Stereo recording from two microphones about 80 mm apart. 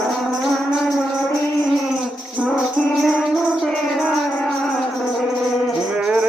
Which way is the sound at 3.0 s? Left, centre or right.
Centre.